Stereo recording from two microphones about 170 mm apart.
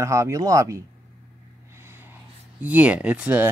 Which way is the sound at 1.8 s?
15° right (ahead or behind).